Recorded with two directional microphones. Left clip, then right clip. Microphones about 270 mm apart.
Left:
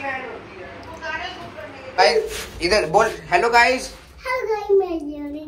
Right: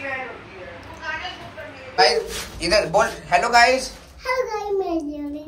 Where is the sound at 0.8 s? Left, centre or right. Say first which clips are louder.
Left 1 dB; centre.